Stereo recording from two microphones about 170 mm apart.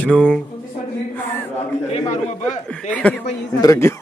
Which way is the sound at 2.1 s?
40° left (ahead or behind).